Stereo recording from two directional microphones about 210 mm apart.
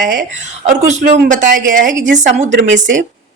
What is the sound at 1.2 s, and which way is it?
Speech, 40° right (ahead or behind).